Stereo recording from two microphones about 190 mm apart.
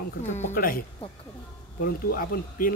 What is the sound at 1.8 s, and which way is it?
Speech, 50° left (ahead or behind).